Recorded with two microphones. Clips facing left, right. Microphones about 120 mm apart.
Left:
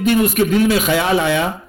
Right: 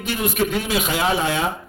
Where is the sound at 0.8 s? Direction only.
70° left (ahead or behind).